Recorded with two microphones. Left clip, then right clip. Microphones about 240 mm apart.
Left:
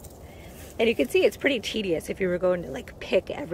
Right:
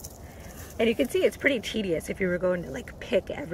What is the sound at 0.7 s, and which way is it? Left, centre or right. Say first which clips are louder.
Speech: left 2 dB; centre.